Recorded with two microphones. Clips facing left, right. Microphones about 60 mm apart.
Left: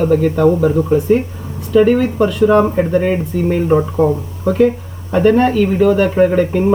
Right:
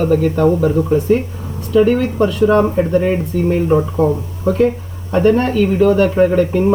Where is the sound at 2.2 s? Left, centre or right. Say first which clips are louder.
Even; centre.